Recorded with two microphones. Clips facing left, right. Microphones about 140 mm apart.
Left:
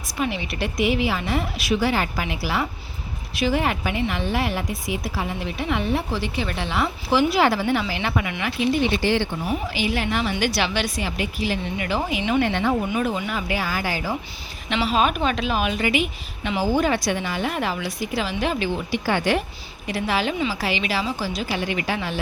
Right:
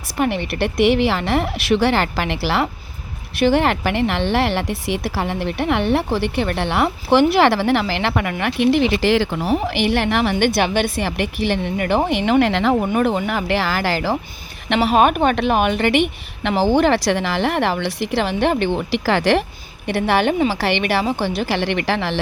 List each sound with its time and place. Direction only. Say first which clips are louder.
0.1 s a woman's voice: right 6 dB; 60° right (ahead or behind)
10.3 s a woman's voice: right 6 dB; 50° right (ahead or behind); by 12.7 s 90° right
12.8 s a woman's voice: right 6 dB; 55° right (ahead or behind); by 14.2 s 85° right
14.7 s a woman's voice: right 6 dB; 60° right (ahead or behind); by 19.5 s 75° right (ahead or behind)
19.9 s a woman's voice: right 6 dB; 65° right (ahead or behind)